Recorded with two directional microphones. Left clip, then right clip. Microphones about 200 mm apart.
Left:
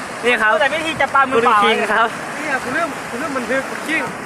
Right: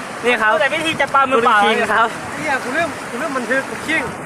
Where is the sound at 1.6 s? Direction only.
Centre (ahead or behind).